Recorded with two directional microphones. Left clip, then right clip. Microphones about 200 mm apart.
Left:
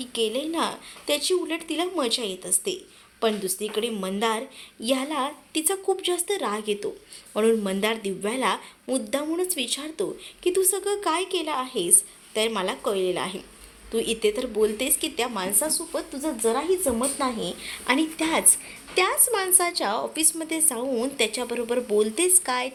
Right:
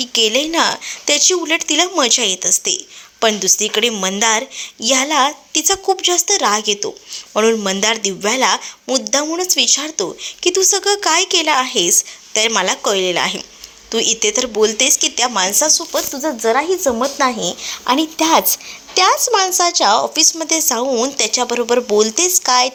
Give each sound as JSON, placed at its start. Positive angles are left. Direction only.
{"t": 0.0, "sound": "a woman's voice", "side_deg": -20}